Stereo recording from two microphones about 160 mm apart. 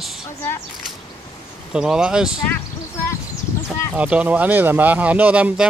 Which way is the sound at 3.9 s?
5° right (ahead or behind).